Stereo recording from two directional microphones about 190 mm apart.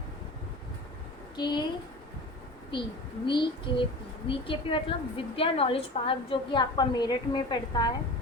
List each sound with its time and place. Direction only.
1.4 s a woman's voice: 20° left (ahead or behind)
2.7 s a woman's voice: 25° left (ahead or behind)